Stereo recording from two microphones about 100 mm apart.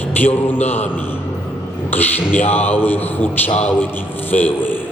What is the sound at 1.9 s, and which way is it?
Music, 20° left (ahead or behind).